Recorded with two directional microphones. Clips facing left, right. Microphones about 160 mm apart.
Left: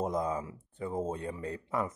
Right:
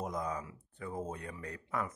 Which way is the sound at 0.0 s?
30° left (ahead or behind).